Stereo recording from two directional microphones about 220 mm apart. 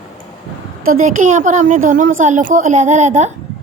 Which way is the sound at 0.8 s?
35° right (ahead or behind).